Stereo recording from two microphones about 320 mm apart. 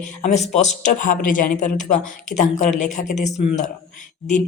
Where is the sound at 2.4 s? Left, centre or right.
Left.